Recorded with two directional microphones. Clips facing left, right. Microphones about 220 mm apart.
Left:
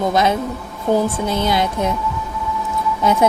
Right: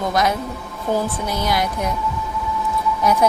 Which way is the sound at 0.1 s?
25° left (ahead or behind).